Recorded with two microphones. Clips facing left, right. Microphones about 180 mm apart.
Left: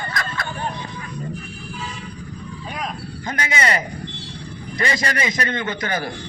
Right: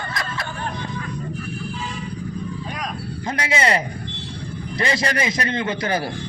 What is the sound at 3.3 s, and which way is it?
Speech, 30° right (ahead or behind).